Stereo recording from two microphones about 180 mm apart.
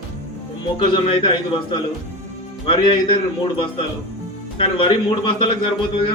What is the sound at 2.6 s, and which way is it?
Speech, 30° left (ahead or behind).